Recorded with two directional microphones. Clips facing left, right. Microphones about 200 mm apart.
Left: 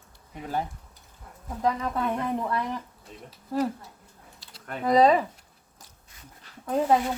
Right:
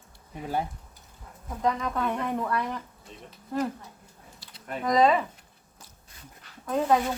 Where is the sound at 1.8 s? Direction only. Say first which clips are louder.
Left 1 dB; 30° left (ahead or behind).